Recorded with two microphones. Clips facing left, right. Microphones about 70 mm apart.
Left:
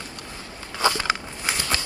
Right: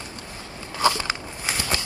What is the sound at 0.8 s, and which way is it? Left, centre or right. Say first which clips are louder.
Biting: even; left.